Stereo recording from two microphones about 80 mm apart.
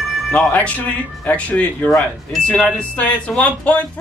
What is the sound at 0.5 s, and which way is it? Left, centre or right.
Speech, centre.